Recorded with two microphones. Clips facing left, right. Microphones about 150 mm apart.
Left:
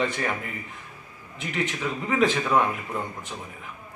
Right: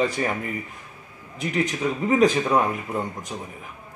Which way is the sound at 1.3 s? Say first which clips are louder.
Right 4 dB; 40° right (ahead or behind).